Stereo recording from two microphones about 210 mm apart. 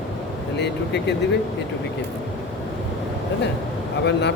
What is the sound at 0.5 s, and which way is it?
Speech, 55° left (ahead or behind).